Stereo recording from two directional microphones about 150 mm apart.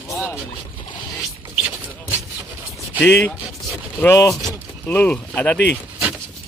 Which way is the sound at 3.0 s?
15° left (ahead or behind).